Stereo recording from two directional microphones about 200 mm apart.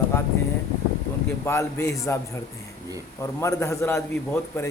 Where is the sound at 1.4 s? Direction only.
10° left (ahead or behind).